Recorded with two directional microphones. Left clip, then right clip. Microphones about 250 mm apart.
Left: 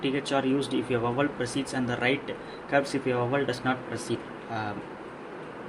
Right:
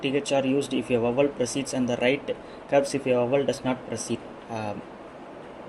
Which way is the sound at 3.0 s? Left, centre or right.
Right.